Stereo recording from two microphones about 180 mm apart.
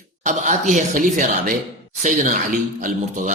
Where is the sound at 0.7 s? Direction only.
45° right (ahead or behind).